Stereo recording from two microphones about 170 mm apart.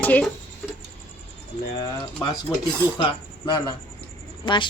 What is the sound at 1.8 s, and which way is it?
A woman's voice, 25° left (ahead or behind).